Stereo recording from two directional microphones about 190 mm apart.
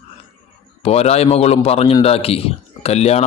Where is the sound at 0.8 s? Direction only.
35° left (ahead or behind).